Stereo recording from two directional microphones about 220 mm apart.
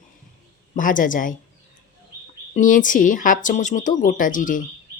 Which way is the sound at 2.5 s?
35° left (ahead or behind).